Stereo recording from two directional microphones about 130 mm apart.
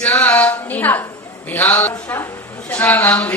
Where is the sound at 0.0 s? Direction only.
15° left (ahead or behind).